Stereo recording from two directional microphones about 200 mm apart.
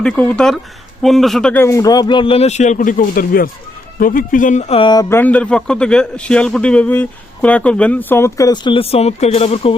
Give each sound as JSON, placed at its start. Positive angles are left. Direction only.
{"t": 0.0, "sound": "speech", "side_deg": 5}
{"t": 5.0, "sound": "a man's voice", "side_deg": 10}